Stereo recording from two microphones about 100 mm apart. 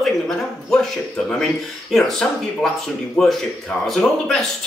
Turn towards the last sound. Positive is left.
turn(degrees=5)  # may be behind; listen again after turning